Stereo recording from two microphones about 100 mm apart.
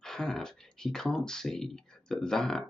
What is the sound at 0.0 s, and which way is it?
Speech, 5° left (ahead or behind).